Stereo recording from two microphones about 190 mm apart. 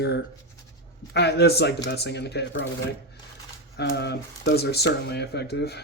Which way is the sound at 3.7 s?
60° left (ahead or behind).